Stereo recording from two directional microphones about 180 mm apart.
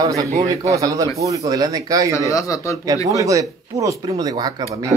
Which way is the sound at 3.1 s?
20° right (ahead or behind).